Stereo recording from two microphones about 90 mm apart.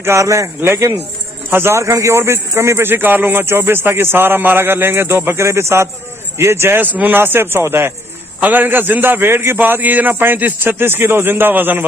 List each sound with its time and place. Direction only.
0.0 s a man's voice: 35° right (ahead or behind)